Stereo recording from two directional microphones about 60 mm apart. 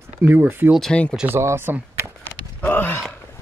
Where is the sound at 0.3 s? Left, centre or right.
Right.